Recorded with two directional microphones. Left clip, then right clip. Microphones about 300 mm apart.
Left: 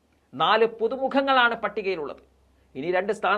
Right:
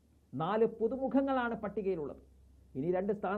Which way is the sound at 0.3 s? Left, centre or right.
Centre.